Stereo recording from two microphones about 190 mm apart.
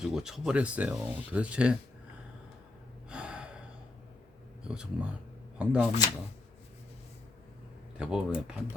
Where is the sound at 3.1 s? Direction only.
5° right (ahead or behind).